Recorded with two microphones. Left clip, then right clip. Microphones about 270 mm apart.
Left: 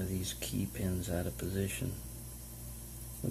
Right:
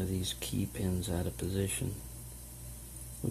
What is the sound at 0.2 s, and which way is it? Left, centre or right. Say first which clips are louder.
Speech: right 2 dB; right.